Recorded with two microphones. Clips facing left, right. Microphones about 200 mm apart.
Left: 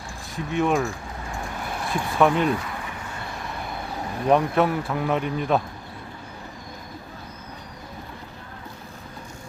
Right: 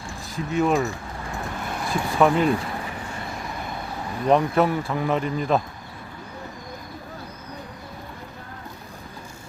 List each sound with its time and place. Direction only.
0.3 s a man's voice: centre (ahead or behind)
4.3 s a man's voice: centre (ahead or behind)